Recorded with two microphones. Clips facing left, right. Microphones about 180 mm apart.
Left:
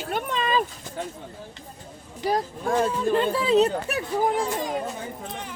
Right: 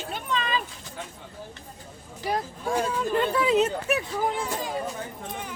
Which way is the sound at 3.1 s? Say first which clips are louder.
Left 1 dB; 30° left (ahead or behind).